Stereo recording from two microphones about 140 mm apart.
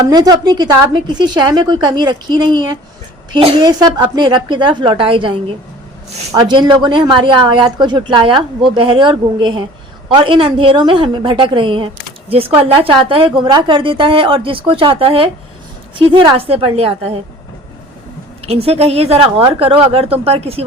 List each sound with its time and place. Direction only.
0.0 s a woman's voice: 30° right (ahead or behind)
6.4 s a woman's voice: 35° right (ahead or behind)
18.4 s speech: 45° right (ahead or behind)